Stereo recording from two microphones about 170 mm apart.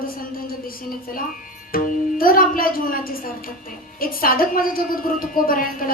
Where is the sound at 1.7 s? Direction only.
55° left (ahead or behind).